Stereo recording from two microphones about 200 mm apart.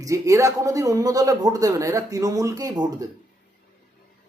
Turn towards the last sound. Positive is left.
turn(degrees=-20)  # may be behind; listen again after turning